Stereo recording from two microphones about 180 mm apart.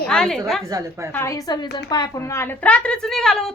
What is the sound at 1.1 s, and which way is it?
A woman's voice, 15° left (ahead or behind).